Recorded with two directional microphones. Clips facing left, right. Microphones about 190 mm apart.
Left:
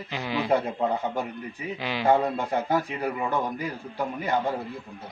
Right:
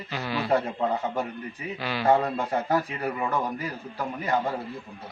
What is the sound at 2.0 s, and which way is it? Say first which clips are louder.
Speech: even; centre (ahead or behind).